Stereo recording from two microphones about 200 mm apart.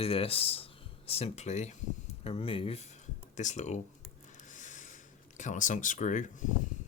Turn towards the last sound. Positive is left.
turn(degrees=40)  # may be behind; listen again after turning